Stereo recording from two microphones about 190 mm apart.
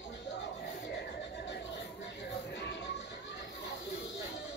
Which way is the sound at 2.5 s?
65° left (ahead or behind).